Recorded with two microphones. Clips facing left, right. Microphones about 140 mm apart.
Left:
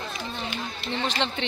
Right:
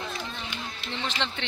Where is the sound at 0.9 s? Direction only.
50° left (ahead or behind).